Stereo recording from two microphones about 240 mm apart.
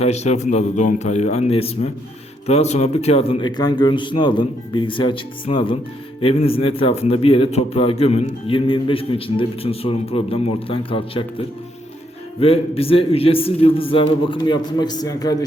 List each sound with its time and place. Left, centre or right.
0.0 s a man's voice: left
12.4 s a man's voice: left